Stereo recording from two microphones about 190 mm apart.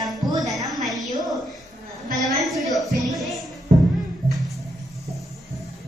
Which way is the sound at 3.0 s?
Centre (ahead or behind).